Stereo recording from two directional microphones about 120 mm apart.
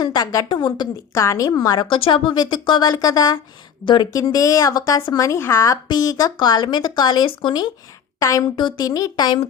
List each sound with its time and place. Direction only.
0.0 s speech: 35° left (ahead or behind)
8.2 s speech: 25° left (ahead or behind)